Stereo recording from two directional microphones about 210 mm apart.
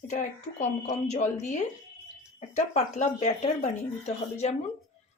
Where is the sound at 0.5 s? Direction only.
35° left (ahead or behind).